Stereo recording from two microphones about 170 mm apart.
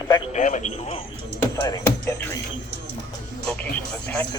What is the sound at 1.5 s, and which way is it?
Speech, 20° left (ahead or behind).